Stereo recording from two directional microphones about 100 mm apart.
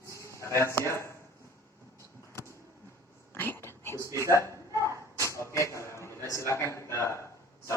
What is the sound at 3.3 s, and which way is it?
Whispering, 25° left (ahead or behind).